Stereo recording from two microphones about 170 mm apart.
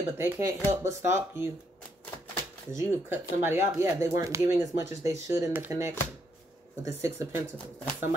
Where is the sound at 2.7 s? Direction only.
15° right (ahead or behind).